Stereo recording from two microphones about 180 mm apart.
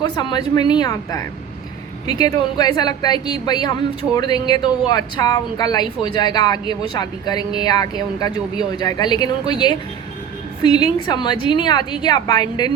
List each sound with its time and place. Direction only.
0.0 s a woman's voice: 25° left (ahead or behind)